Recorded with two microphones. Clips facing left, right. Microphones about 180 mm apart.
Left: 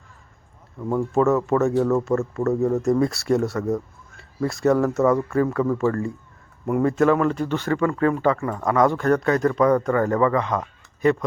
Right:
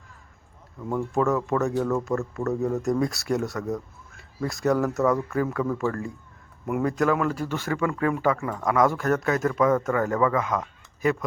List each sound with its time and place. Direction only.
0.8 s speech: 15° left (ahead or behind)
1.1 s speech: centre (ahead or behind)